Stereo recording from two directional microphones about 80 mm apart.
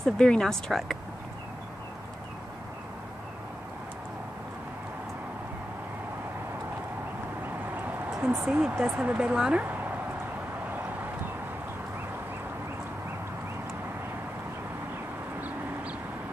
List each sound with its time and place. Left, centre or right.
0.0 s speech: centre
7.4 s vehicle: right
8.1 s speech: centre